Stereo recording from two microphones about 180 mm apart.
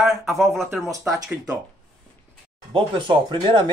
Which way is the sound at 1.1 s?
20° right (ahead or behind).